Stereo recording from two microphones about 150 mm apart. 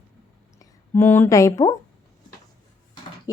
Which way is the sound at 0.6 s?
15° left (ahead or behind).